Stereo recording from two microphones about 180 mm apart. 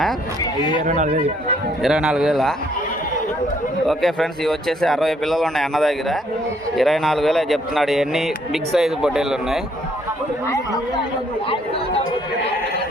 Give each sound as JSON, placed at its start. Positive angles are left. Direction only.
{"t": 0.5, "sound": "speech", "side_deg": 25}
{"t": 0.9, "sound": "a man's voice", "side_deg": -45}
{"t": 1.8, "sound": "speech", "side_deg": -5}
{"t": 3.8, "sound": "speech", "side_deg": 0}